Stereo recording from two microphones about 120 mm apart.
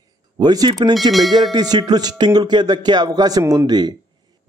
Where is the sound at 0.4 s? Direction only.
35° right (ahead or behind).